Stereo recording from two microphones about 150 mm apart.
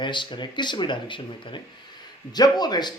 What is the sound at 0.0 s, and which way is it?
Speech, 30° left (ahead or behind).